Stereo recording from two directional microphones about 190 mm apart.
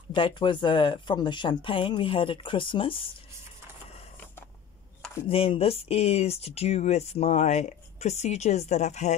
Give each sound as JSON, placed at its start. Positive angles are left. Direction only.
{"t": 0.1, "sound": "speech", "side_deg": 25}
{"t": 5.3, "sound": "speech", "side_deg": 30}